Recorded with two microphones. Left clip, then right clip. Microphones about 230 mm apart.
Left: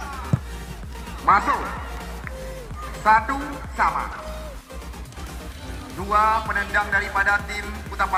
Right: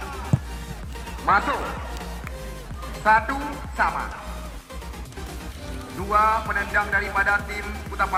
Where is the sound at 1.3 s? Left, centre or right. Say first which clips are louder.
Left 3 dB; left.